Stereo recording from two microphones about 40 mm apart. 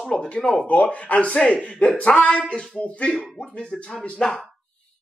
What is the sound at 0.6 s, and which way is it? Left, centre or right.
Speech, left.